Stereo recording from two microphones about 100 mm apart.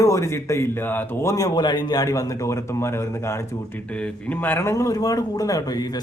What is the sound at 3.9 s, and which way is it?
Speech, 10° left (ahead or behind).